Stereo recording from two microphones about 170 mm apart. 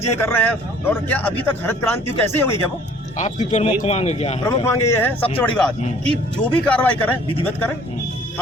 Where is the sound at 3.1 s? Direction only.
45° left (ahead or behind).